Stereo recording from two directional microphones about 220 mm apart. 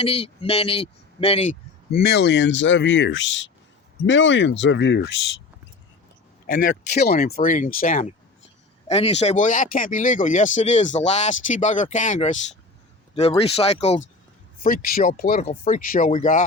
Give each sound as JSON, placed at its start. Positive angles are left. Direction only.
{"t": 0.0, "sound": "speech", "side_deg": 25}
{"t": 1.9, "sound": "speech", "side_deg": 50}
{"t": 6.5, "sound": "speech", "side_deg": 40}
{"t": 8.9, "sound": "speech", "side_deg": 25}
{"t": 14.6, "sound": "speech", "side_deg": 40}